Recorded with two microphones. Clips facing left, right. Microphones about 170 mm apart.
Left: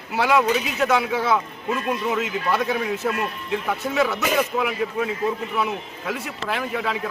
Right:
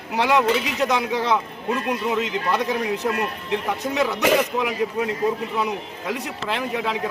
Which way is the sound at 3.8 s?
15° right (ahead or behind).